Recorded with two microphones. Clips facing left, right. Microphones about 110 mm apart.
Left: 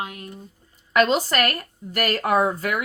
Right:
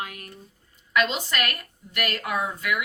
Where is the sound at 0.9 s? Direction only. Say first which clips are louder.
Left 6 dB; 40° left (ahead or behind).